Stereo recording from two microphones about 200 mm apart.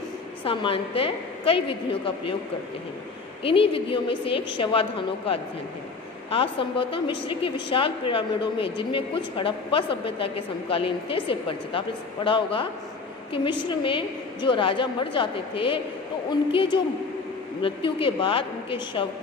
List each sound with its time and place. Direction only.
0.4 s a woman's voice: 25° left (ahead or behind)
3.4 s a woman's voice: 25° left (ahead or behind)